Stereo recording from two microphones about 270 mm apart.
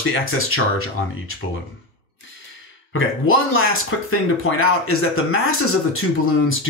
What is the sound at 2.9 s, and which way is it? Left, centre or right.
Speech, left.